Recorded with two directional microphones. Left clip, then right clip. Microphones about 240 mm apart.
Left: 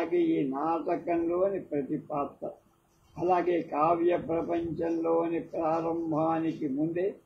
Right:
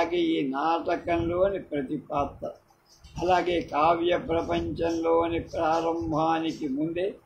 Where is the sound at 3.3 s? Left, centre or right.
Right.